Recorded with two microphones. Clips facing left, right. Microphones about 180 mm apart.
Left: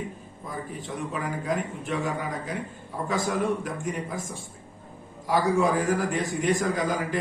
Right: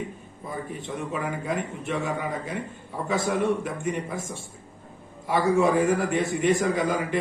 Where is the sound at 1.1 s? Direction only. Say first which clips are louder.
Even; centre (ahead or behind).